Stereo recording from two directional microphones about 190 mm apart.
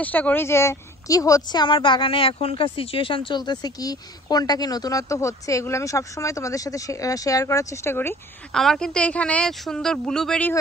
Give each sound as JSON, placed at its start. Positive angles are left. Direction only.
{"t": 0.0, "sound": "a woman's voice", "side_deg": 10}